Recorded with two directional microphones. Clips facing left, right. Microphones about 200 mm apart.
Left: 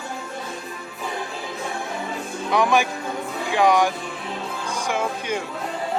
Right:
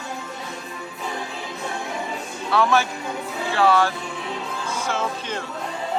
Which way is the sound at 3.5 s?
15° left (ahead or behind).